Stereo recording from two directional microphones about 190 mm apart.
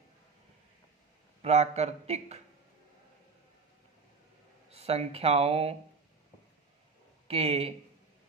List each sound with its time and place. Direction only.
1.4 s speech: 35° right (ahead or behind)
4.7 s speech: 35° right (ahead or behind)
7.3 s speech: 30° right (ahead or behind)